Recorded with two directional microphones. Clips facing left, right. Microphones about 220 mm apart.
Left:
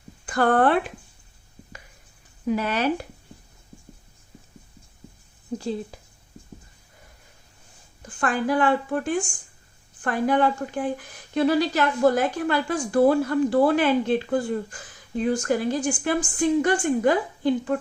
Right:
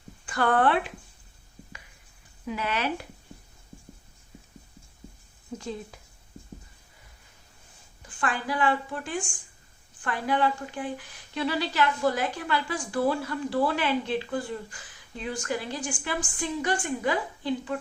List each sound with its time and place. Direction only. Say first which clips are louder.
0.3 s a woman's voice: left 4 dB; 45° left (ahead or behind)
2.5 s speech: left 7 dB; 40° left (ahead or behind)
8.2 s a woman's voice: left 6 dB; 50° left (ahead or behind)